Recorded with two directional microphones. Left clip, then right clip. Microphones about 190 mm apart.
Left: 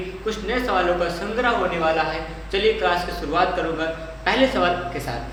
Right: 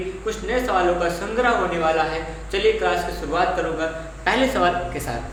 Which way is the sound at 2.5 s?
Centre (ahead or behind).